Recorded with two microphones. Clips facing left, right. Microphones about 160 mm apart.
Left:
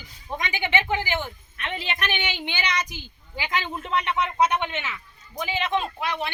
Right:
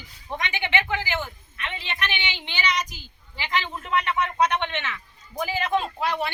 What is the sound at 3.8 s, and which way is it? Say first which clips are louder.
Speech: right 1 dB; 25° left (ahead or behind).